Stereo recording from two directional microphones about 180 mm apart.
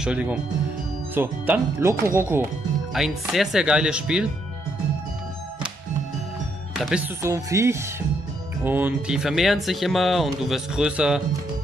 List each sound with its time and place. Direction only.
0.0 s speech: 5° right (ahead or behind)
2.9 s speech: centre (ahead or behind)
6.7 s speech: 5° right (ahead or behind)
7.2 s speech: 15° right (ahead or behind)